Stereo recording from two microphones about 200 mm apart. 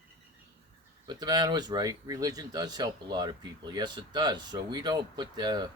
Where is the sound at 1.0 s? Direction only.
20° right (ahead or behind).